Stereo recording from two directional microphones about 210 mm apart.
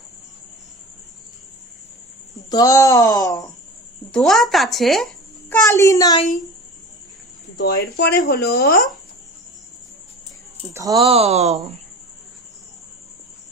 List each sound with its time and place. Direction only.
2.5 s speech: 15° left (ahead or behind)
4.1 s speech: centre (ahead or behind)
5.5 s speech: 15° left (ahead or behind)
7.5 s speech: 50° left (ahead or behind)
10.8 s speech: 15° right (ahead or behind)
11.0 s speech: 30° right (ahead or behind)